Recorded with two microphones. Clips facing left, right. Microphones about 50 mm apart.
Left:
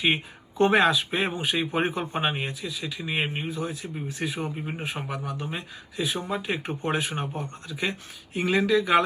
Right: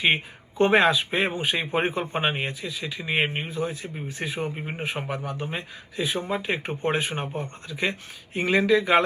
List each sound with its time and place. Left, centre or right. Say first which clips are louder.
0.0 s speech: right 2 dB; right